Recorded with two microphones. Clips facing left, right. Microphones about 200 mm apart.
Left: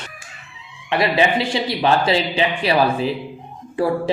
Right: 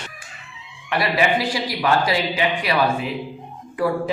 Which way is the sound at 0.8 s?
25° left (ahead or behind).